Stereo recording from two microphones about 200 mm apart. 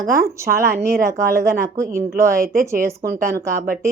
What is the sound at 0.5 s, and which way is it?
A woman's voice, 15° right (ahead or behind).